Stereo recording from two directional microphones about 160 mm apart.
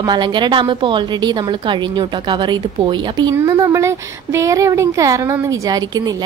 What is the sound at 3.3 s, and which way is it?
Speech, 20° right (ahead or behind).